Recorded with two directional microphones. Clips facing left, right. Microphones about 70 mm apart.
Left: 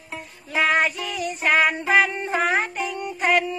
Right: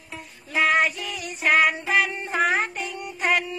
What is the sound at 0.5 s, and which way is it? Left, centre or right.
Music, centre.